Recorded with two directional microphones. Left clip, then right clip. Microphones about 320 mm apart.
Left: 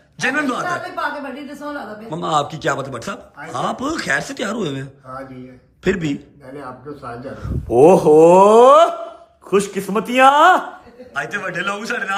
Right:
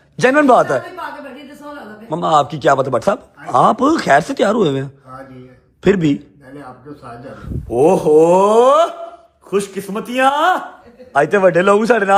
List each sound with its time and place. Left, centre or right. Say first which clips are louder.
0.2 s a man's voice: right 9 dB; centre
2.0 s a man's voice: right 6 dB; centre
11.1 s a man's voice: right 12 dB; centre